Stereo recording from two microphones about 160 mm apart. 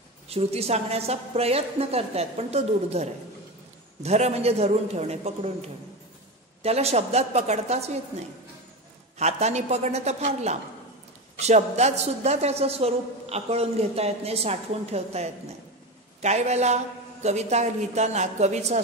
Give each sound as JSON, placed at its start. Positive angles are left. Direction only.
{"t": 0.3, "sound": "a woman's voice", "side_deg": -40}
{"t": 9.2, "sound": "a man's voice", "side_deg": -45}